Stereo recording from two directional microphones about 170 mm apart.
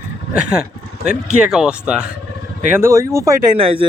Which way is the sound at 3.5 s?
35° right (ahead or behind).